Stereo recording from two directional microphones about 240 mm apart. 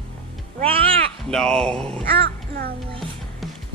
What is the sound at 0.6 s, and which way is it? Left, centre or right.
Cat, right.